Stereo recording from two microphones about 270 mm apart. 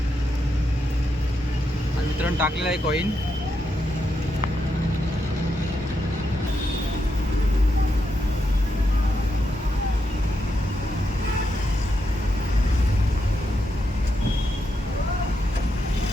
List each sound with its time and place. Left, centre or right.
2.4 s speech: centre